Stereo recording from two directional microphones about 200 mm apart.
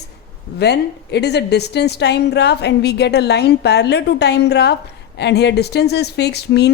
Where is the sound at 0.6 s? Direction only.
55° left (ahead or behind).